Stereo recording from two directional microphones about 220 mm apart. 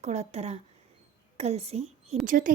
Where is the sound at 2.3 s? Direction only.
40° right (ahead or behind).